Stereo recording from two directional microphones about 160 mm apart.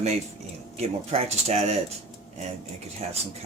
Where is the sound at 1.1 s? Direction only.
45° right (ahead or behind).